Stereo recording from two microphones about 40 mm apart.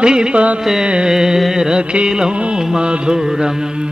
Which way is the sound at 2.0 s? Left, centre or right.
Centre.